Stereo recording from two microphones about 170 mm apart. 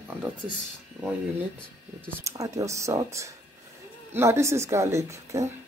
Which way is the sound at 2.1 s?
20° right (ahead or behind).